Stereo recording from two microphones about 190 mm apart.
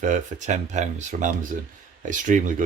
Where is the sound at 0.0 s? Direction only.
40° right (ahead or behind).